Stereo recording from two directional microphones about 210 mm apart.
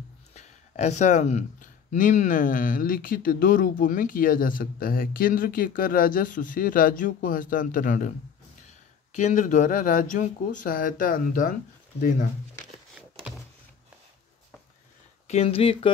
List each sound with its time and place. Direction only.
0.3 s speech: 35° left (ahead or behind)
9.1 s speech: 35° left (ahead or behind)
15.2 s speech: 30° left (ahead or behind)